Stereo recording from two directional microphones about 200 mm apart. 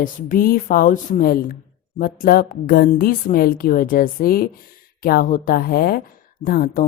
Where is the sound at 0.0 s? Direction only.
45° left (ahead or behind).